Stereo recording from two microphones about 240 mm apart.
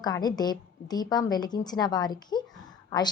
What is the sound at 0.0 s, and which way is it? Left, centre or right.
A woman's voice, centre.